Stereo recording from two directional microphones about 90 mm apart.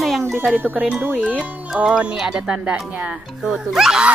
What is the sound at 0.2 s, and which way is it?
Music, 30° right (ahead or behind).